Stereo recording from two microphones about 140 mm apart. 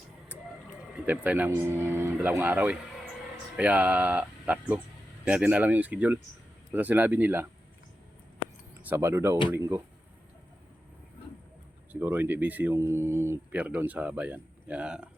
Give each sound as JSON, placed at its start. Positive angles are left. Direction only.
{"t": 0.9, "sound": "speech", "side_deg": -10}
{"t": 8.8, "sound": "speech", "side_deg": -15}
{"t": 11.9, "sound": "speech", "side_deg": -15}